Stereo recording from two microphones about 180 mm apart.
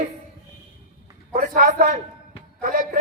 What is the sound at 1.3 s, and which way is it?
A man's voice, 50° right (ahead or behind).